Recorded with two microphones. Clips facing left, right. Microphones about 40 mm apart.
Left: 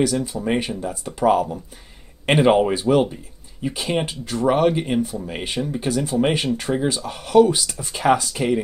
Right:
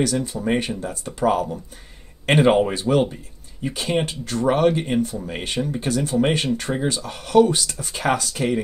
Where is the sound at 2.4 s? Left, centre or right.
Centre.